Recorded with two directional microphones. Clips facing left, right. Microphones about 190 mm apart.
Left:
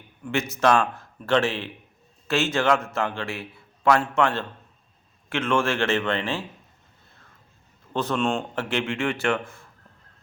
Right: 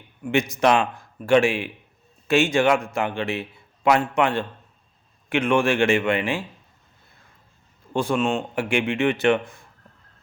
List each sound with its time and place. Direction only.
0.3 s speech: 15° right (ahead or behind)
7.9 s speech: 10° right (ahead or behind)